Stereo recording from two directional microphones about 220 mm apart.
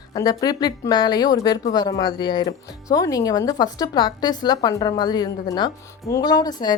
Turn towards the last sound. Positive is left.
turn(degrees=20)  # may be behind; listen again after turning